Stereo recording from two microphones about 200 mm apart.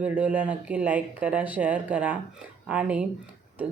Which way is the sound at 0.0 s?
5° right (ahead or behind).